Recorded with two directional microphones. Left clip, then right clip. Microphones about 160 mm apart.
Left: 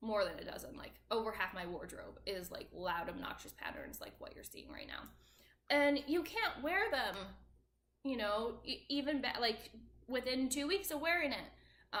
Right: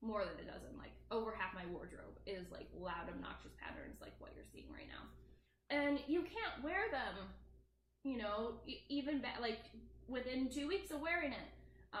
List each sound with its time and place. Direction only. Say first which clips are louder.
0.0 s a sound: left 6 dB; 15° left (ahead or behind)
2.2 s a woman's voice: left 5 dB; 15° left (ahead or behind)
8.0 s a woman's voice: left 5 dB; 20° left (ahead or behind)